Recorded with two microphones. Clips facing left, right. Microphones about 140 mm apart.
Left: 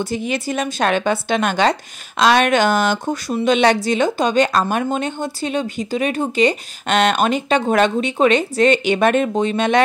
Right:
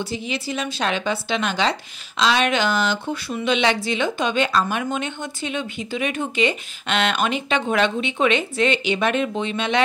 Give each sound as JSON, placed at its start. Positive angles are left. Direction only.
{"t": 0.0, "sound": "speech", "side_deg": 50}